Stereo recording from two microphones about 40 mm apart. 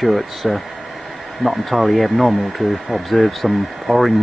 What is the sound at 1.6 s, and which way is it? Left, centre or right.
Speech, centre.